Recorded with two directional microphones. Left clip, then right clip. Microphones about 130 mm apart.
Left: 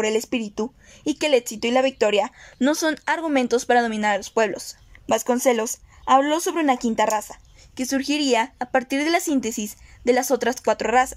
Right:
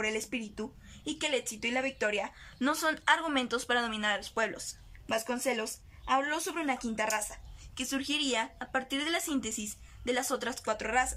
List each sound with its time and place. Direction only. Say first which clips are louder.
0.0 s a woman's voice: left 11 dB; 50° left (ahead or behind)
2.6 s speech: left 8 dB; 40° left (ahead or behind)
5.0 s a woman's voice: left 12 dB; 70° left (ahead or behind)